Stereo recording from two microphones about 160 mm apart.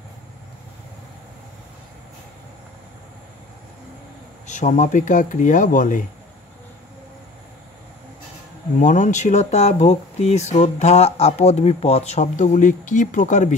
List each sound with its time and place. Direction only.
4.5 s speech: 50° left (ahead or behind)
8.7 s speech: 50° left (ahead or behind)